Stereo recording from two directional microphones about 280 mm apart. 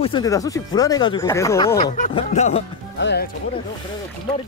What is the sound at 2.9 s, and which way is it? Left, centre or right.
Speech, left.